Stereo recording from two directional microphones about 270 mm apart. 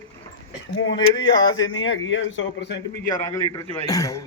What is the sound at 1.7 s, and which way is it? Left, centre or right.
Speech, left.